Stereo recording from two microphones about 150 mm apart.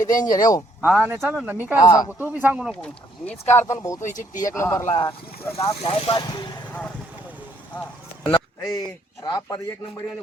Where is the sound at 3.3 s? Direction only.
45° left (ahead or behind).